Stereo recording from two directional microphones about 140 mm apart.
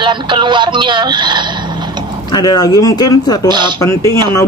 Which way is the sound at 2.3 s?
30° left (ahead or behind).